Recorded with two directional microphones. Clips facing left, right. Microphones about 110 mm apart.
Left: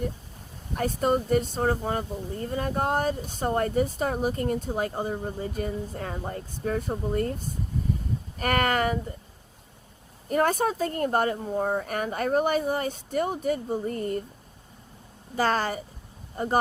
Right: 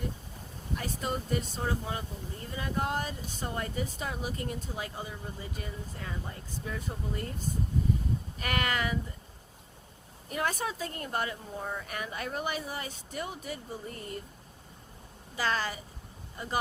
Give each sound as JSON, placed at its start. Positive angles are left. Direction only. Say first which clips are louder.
{"t": 0.8, "sound": "speech", "louder": "left 11 dB", "side_deg": 50}
{"t": 10.2, "sound": "speech", "louder": "left 9 dB", "side_deg": 45}
{"t": 15.4, "sound": "speech", "louder": "left 7 dB", "side_deg": 45}